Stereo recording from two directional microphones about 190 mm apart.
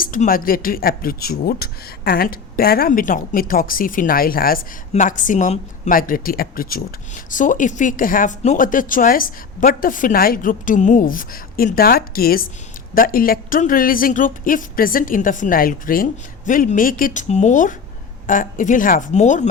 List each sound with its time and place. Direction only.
0.0 s speech: 45° left (ahead or behind)